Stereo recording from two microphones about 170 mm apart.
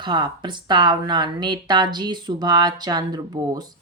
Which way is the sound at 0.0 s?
25° right (ahead or behind).